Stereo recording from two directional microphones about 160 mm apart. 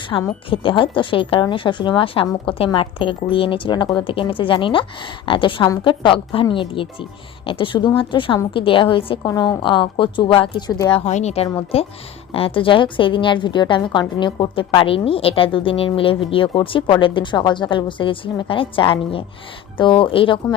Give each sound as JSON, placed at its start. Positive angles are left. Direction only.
{"t": 0.1, "sound": "speech", "side_deg": 20}
{"t": 0.5, "sound": "a woman's voice", "side_deg": 30}
{"t": 11.0, "sound": "a woman's voice", "side_deg": 45}